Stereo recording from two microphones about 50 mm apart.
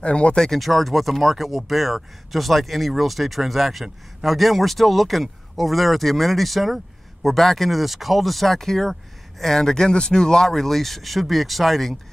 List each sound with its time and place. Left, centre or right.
0.0 s speech: left
0.4 s speech: centre